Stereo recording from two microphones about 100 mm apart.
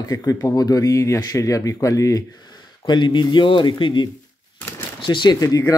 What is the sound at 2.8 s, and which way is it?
Speech, 50° left (ahead or behind).